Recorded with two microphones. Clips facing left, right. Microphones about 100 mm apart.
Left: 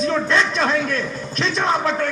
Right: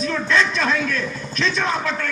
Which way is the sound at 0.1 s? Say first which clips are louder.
Left 1 dB; 30° left (ahead or behind).